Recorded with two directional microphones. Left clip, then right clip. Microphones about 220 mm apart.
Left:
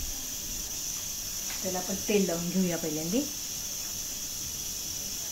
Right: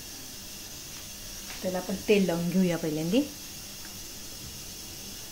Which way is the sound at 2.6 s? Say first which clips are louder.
Right 2 dB; 30° right (ahead or behind).